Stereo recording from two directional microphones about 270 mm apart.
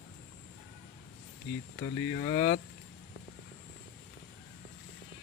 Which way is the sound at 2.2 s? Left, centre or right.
Left.